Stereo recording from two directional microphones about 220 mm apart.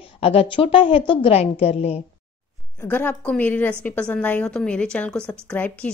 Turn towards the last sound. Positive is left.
turn(degrees=5)  # may be behind; listen again after turning